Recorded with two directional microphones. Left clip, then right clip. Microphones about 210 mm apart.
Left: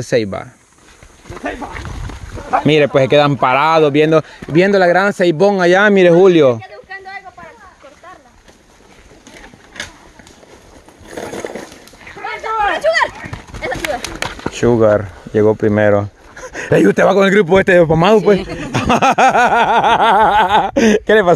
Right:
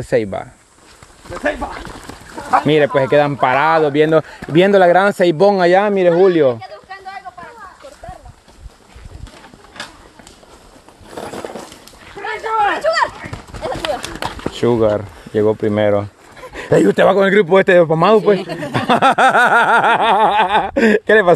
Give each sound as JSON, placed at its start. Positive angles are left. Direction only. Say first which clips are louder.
{"t": 0.0, "sound": "speech", "louder": "left 1 dB", "side_deg": 10}
{"t": 1.3, "sound": "speech", "louder": "right 5 dB", "side_deg": -35}
{"t": 2.6, "sound": "speech", "louder": "left 5 dB", "side_deg": 25}
{"t": 4.3, "sound": "speech", "louder": "right 1 dB", "side_deg": 0}
{"t": 5.8, "sound": "speech", "louder": "left 3 dB", "side_deg": 40}
{"t": 9.8, "sound": "a sound", "louder": "left 3 dB", "side_deg": 40}
{"t": 11.1, "sound": "horse", "louder": "left 2 dB", "side_deg": 40}
{"t": 12.2, "sound": "a sound", "louder": "right 1 dB", "side_deg": 10}
{"t": 12.7, "sound": "a sound", "louder": "left 2 dB", "side_deg": 40}
{"t": 13.2, "sound": "horse", "louder": "left 1 dB", "side_deg": -5}
{"t": 13.6, "sound": "clip-clop", "louder": "left 1 dB", "side_deg": 50}
{"t": 14.6, "sound": "speech", "louder": "left 3 dB", "side_deg": 15}